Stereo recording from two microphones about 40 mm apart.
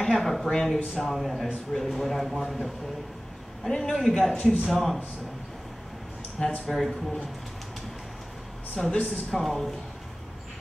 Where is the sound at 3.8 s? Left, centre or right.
Centre.